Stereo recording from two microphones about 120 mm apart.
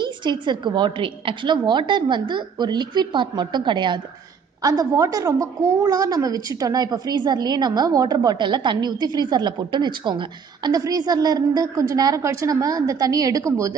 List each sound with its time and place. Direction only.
0.0 s a woman's voice: 40° right (ahead or behind)